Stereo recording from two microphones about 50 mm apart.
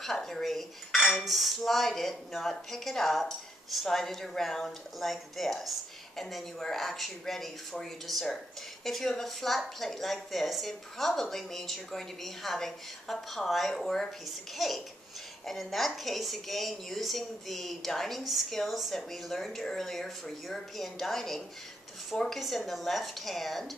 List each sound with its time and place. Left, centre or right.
0.0 s a woman's voice: centre